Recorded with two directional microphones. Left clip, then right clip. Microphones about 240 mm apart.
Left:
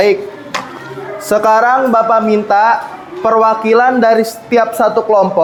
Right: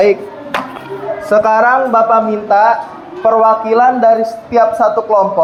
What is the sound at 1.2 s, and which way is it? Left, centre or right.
A man's voice, left.